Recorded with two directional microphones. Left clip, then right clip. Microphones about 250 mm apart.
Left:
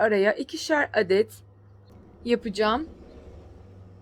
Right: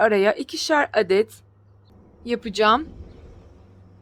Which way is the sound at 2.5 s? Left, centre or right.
Centre.